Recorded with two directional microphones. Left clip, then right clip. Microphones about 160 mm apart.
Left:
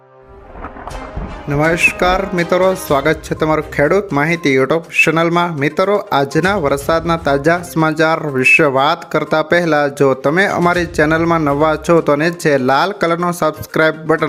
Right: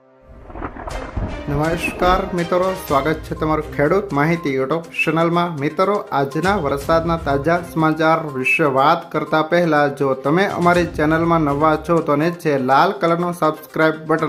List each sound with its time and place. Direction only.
1.5 s speech: 20° left (ahead or behind)